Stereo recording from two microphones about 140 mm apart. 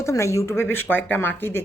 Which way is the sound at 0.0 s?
20° left (ahead or behind).